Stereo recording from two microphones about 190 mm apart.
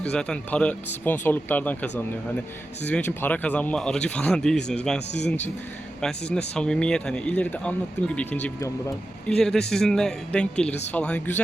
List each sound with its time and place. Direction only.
0.0 s speech: 5° left (ahead or behind)
6.3 s speech: 5° left (ahead or behind)